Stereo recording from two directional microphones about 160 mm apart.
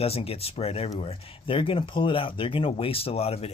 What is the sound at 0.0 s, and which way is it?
Speech, 40° left (ahead or behind).